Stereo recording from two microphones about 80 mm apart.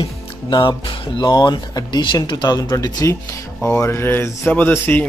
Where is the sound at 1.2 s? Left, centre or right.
Left.